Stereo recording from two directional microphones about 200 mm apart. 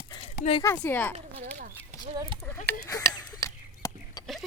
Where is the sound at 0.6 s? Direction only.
10° left (ahead or behind).